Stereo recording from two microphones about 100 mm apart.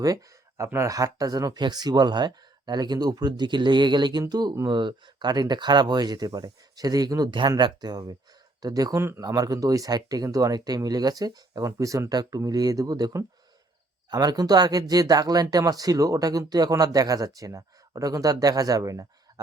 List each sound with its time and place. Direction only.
0.0 s speech: 35° right (ahead or behind)
7.3 s speech: 50° right (ahead or behind)
9.0 s a man's voice: 25° right (ahead or behind)
9.2 s speech: 40° right (ahead or behind)